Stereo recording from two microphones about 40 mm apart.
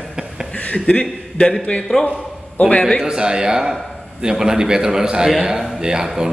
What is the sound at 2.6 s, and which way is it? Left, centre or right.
Speech, left.